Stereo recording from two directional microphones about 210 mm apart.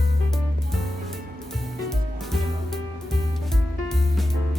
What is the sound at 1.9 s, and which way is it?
Music, centre (ahead or behind).